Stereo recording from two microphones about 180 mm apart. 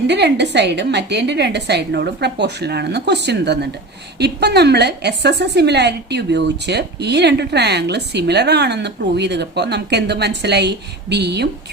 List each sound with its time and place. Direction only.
0.1 s a woman's voice: 70° right (ahead or behind)